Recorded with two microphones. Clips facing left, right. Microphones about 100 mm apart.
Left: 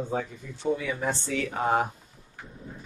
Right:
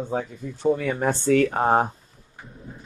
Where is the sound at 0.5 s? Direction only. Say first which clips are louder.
Right 6 dB; 45° right (ahead or behind).